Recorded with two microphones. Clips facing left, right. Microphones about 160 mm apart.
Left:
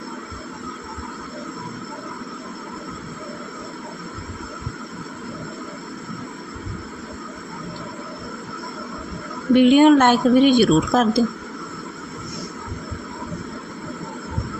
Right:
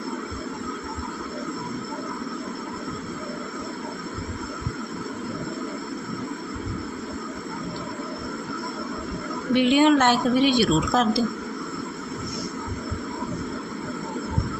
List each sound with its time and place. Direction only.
9.5 s a woman's voice: 50° left (ahead or behind)